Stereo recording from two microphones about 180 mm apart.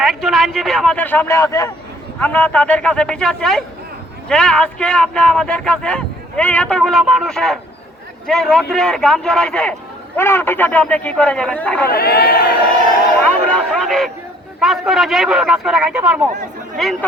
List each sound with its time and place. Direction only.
0.0 s speech: centre (ahead or behind)
11.9 s speech: 60° left (ahead or behind)
13.2 s speech: 5° left (ahead or behind)